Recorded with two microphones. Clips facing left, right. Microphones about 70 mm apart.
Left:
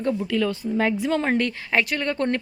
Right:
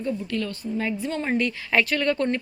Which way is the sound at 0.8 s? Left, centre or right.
Left.